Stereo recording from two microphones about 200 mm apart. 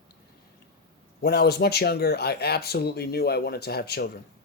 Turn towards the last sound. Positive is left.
turn(degrees=50)  # may be behind; listen again after turning